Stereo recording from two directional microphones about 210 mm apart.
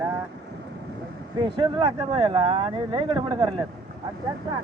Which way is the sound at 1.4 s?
25° right (ahead or behind).